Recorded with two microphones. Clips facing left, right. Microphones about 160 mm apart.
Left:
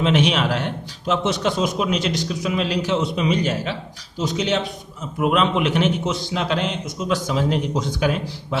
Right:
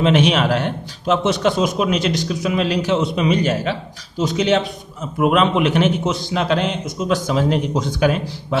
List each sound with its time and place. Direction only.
0.0 s a man's voice: 50° right (ahead or behind)